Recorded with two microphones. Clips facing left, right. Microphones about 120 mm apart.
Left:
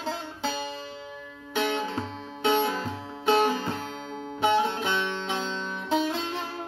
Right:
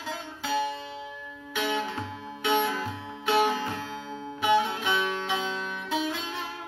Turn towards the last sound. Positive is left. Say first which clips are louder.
# left 4 dB
turn(degrees=30)  # may be behind; listen again after turning